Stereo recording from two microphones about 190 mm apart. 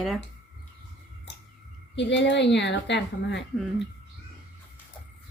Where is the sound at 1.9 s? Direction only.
70° left (ahead or behind).